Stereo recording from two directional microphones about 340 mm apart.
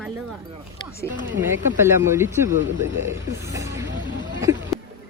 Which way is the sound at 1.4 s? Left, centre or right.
Centre.